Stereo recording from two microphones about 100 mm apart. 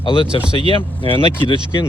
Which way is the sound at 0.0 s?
60° left (ahead or behind).